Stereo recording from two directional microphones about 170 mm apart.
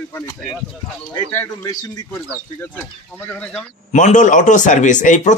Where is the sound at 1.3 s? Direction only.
15° left (ahead or behind).